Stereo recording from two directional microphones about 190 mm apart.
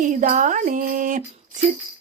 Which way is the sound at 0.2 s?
40° right (ahead or behind).